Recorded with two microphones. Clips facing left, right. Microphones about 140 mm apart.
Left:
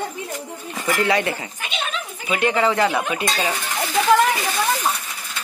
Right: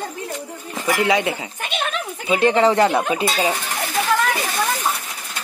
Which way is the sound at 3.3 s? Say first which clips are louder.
Right 3 dB; 15° right (ahead or behind).